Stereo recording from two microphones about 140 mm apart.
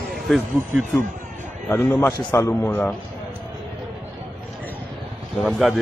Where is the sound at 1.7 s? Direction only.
15° left (ahead or behind).